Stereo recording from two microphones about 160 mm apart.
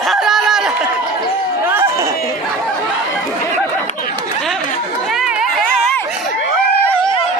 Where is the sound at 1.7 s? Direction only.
15° right (ahead or behind).